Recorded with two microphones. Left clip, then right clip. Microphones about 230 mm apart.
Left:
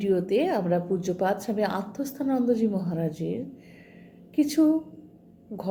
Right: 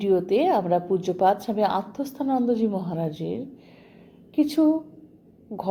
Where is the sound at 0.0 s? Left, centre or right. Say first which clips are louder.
Right 3 dB; right.